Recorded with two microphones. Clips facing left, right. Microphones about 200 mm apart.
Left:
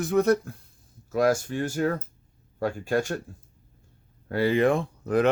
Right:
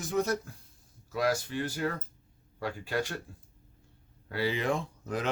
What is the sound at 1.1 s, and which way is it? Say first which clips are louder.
Speech: left 7 dB; 50° left (ahead or behind).